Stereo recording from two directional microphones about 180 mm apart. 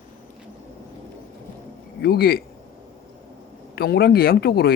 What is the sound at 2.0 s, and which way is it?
Speech, 60° left (ahead or behind).